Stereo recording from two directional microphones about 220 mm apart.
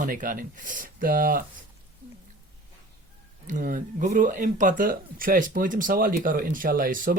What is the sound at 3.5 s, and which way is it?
Speech, 35° right (ahead or behind).